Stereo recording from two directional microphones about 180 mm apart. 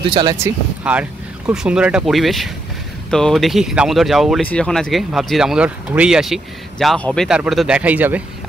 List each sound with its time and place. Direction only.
0.0 s speech: 25° right (ahead or behind)
0.8 s speech: 10° right (ahead or behind)